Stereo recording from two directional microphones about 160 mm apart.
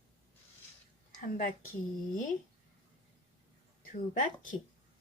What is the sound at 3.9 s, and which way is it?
Speech, 55° left (ahead or behind).